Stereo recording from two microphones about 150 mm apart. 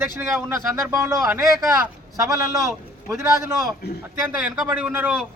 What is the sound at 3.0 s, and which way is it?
A man's voice, 15° right (ahead or behind).